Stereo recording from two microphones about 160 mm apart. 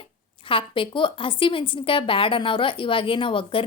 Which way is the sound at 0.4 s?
35° left (ahead or behind).